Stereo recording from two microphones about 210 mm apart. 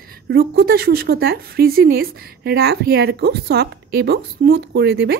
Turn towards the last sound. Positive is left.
turn(degrees=-50)  # may be behind; listen again after turning